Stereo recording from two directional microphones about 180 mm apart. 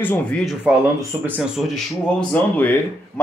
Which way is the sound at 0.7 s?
10° right (ahead or behind).